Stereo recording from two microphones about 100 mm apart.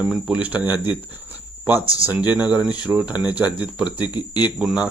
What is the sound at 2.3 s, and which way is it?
Speech, 15° right (ahead or behind).